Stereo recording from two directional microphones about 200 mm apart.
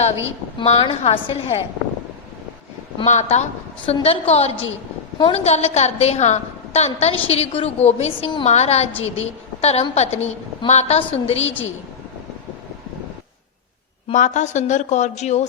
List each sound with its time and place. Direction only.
0.6 s a woman's voice: 30° left (ahead or behind)
3.1 s a woman's voice: 35° left (ahead or behind)
14.1 s a woman's voice: 35° left (ahead or behind)